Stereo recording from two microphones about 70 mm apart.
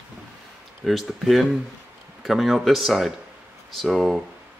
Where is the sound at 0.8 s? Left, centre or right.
Centre.